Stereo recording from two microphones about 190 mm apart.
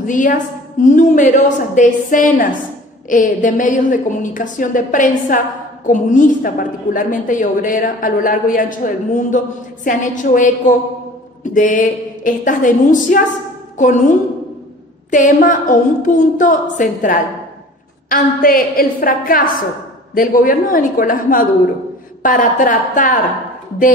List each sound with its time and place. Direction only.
0.0 s a woman's voice: 45° left (ahead or behind)
11.5 s a woman's voice: 45° left (ahead or behind)
15.0 s a woman's voice: 45° left (ahead or behind)